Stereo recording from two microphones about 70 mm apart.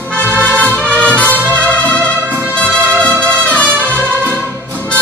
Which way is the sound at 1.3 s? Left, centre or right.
Left.